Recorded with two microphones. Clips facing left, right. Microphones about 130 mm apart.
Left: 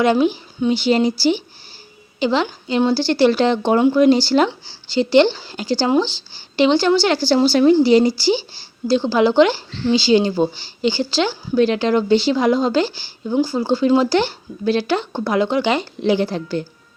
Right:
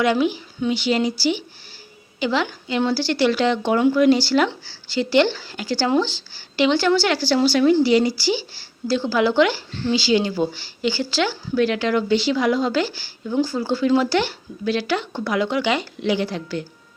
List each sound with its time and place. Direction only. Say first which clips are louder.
0.0 s speech: left 3 dB; 30° left (ahead or behind)
2.1 s a woman's voice: left 3 dB; 25° left (ahead or behind)